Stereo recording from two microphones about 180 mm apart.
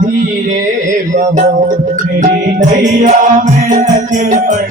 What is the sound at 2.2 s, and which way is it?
Music, 45° right (ahead or behind).